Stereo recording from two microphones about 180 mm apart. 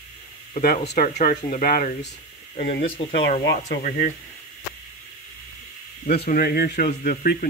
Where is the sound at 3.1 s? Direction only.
65° left (ahead or behind).